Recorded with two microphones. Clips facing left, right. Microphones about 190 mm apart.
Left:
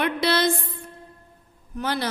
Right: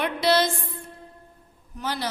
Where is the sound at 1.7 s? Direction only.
60° left (ahead or behind).